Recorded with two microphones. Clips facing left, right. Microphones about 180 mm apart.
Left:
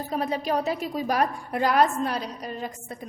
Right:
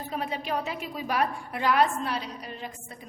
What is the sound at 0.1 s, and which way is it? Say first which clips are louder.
A woman's voice: left 5 dB; 40° left (ahead or behind).